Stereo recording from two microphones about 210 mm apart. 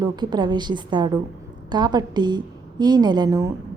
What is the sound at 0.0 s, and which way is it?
A woman's voice, 20° right (ahead or behind).